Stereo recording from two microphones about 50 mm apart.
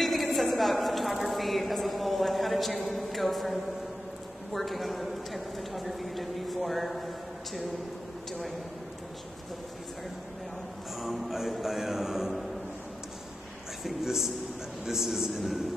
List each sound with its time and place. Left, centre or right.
0.0 s a sound: centre
4.6 s speech: centre
8.3 s speech: centre
11.0 s speech: centre
13.8 s a man's voice: centre